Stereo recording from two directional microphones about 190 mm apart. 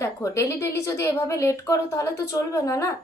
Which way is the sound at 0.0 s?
15° left (ahead or behind).